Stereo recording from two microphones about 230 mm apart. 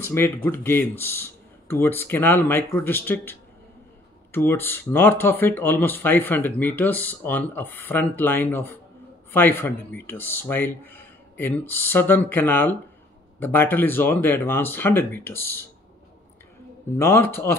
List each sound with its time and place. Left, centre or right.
0.0 s speech: centre
16.9 s speech: centre